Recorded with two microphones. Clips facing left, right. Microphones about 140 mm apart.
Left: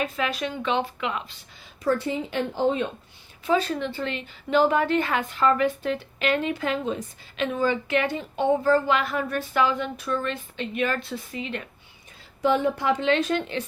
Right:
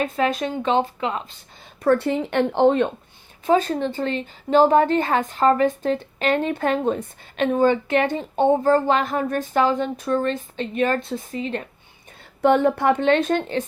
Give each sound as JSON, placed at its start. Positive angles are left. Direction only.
{"t": 0.0, "sound": "speech", "side_deg": -45}
{"t": 1.8, "sound": "a woman's voice", "side_deg": -65}
{"t": 3.4, "sound": "a woman's voice", "side_deg": -45}
{"t": 12.4, "sound": "a woman's voice", "side_deg": -60}